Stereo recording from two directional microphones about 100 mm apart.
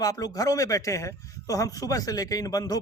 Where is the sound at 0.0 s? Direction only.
40° left (ahead or behind).